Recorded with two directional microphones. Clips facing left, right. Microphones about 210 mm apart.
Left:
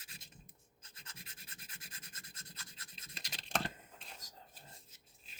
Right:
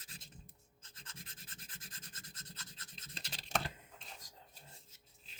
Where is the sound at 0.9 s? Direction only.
10° left (ahead or behind).